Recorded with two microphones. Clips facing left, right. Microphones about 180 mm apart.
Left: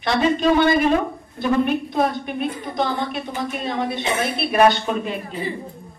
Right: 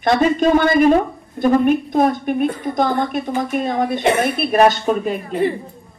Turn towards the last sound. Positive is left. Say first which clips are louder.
# right 7 dB
turn(degrees=-50)  # may be behind; listen again after turning